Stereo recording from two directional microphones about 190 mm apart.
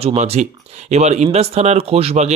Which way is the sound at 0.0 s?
30° right (ahead or behind).